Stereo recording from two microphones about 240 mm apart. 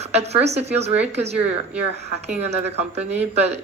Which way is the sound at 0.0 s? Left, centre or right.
Right.